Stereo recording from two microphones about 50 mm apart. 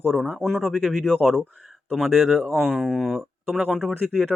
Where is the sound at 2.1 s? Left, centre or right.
Centre.